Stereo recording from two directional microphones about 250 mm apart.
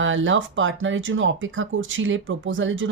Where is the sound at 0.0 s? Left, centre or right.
Right.